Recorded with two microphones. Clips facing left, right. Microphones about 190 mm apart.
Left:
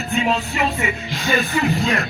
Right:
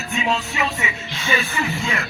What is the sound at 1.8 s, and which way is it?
Music, 35° left (ahead or behind).